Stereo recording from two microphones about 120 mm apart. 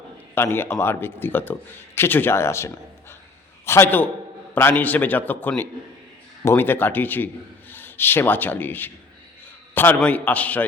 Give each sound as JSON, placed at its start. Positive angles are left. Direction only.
{"t": 0.3, "sound": "a man's voice", "side_deg": 20}